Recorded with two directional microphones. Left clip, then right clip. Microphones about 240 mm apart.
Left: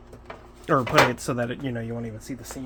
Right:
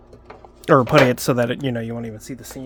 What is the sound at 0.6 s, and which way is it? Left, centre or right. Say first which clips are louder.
Speech: right 6 dB; right.